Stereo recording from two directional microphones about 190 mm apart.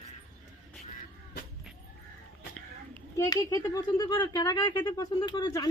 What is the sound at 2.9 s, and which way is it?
Speech, 15° left (ahead or behind).